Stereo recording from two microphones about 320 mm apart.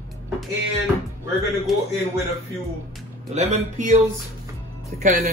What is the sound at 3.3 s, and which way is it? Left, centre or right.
Speech, right.